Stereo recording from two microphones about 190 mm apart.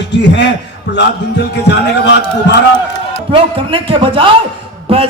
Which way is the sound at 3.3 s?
30° right (ahead or behind).